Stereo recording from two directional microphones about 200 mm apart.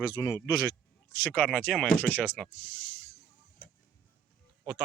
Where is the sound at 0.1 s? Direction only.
20° left (ahead or behind).